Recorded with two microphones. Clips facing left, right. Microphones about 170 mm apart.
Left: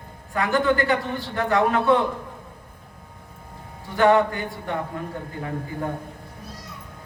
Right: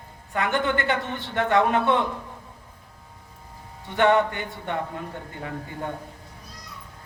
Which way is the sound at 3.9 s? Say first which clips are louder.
Left 2 dB; 25° right (ahead or behind).